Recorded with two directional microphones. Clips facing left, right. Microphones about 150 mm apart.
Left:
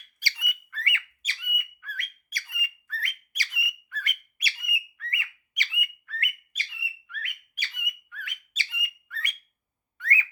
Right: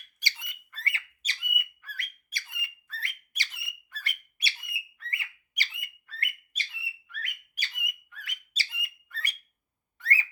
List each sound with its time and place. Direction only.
0.2 s squawk: 20° right (ahead or behind)
0.7 s squawk: 35° right (ahead or behind)
7.1 s bird: 35° right (ahead or behind)
8.1 s squawk: 35° right (ahead or behind)
10.0 s a sound: 35° right (ahead or behind)